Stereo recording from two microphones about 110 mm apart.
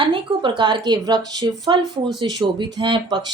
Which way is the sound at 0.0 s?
50° right (ahead or behind).